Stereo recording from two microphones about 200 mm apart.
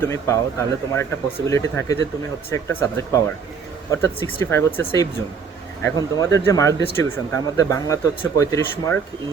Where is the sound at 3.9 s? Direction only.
15° left (ahead or behind).